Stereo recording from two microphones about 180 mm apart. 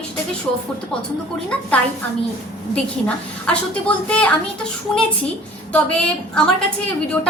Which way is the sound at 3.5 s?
5° left (ahead or behind).